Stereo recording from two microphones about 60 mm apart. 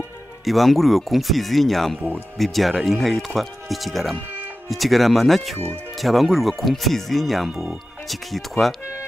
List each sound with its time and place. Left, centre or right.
0.5 s speech: centre